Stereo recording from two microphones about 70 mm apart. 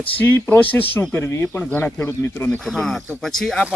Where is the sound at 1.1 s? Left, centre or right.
Left.